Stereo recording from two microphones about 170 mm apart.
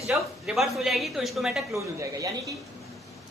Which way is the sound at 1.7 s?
20° right (ahead or behind).